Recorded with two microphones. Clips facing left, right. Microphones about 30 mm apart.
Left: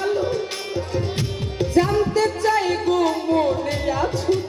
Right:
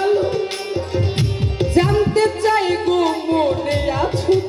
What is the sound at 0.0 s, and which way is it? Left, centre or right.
Tabla, right.